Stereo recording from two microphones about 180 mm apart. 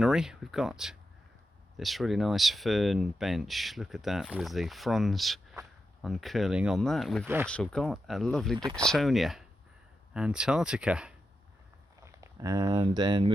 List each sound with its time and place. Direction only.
0.0 s speech: 5° right (ahead or behind)
12.0 s speech: 20° right (ahead or behind)